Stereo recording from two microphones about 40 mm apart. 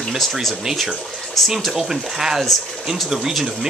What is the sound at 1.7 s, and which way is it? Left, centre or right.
Speech, centre.